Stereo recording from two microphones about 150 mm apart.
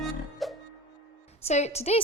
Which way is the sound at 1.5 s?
45° left (ahead or behind).